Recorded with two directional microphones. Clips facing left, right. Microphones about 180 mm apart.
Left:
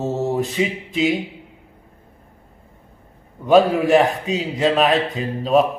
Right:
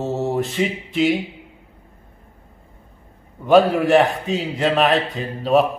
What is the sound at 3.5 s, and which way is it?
Speech, centre (ahead or behind).